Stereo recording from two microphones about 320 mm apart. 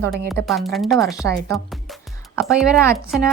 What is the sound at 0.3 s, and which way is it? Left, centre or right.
Speech, centre.